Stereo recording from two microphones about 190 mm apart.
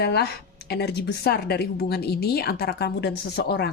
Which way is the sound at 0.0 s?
60° left (ahead or behind).